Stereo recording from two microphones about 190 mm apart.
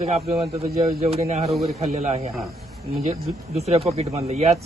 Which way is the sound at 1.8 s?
35° right (ahead or behind).